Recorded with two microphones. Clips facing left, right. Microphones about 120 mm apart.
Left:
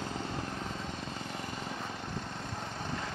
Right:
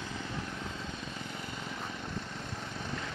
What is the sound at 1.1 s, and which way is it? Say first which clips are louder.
Lawn mower: left 2 dB; 40° left (ahead or behind).